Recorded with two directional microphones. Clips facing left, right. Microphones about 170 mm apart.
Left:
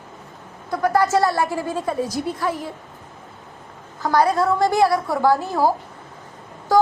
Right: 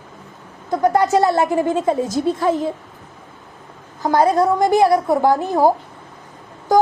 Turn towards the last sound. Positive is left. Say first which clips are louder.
# right 2 dB
turn(degrees=-20)  # may be behind; listen again after turning